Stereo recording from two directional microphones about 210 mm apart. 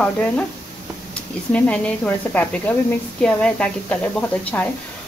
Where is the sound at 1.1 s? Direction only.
5° left (ahead or behind).